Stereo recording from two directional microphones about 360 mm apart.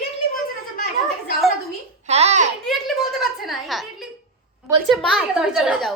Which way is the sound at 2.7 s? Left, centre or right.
Centre.